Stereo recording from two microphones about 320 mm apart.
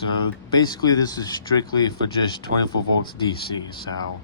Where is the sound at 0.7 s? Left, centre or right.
Centre.